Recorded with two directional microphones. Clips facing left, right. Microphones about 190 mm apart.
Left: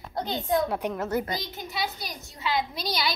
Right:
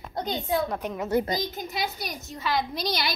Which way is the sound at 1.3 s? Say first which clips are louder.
Right 4 dB; 40° right (ahead or behind).